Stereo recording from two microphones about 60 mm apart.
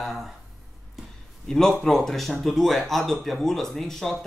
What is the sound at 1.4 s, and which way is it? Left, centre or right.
A man's voice, centre.